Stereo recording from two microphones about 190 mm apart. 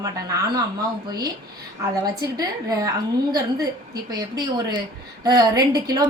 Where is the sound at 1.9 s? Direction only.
20° right (ahead or behind).